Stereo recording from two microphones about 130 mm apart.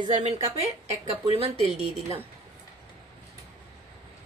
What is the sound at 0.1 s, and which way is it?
A woman's voice, 60° right (ahead or behind).